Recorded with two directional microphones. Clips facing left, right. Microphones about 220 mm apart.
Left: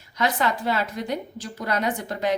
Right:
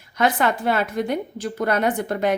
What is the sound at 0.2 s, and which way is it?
A woman's voice, 55° right (ahead or behind).